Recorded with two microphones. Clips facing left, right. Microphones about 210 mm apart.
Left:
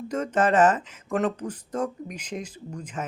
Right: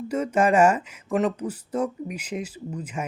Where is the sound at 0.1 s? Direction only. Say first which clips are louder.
Right 2 dB; 10° right (ahead or behind).